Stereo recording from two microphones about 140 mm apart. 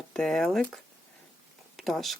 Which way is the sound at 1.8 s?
Centre (ahead or behind).